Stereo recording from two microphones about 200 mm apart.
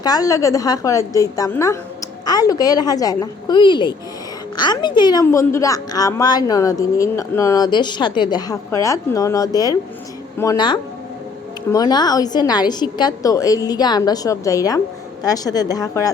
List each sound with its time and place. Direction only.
0.0 s a woman's voice: 20° left (ahead or behind)